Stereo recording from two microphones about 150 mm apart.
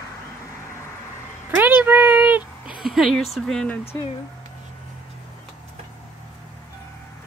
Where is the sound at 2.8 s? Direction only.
Centre (ahead or behind).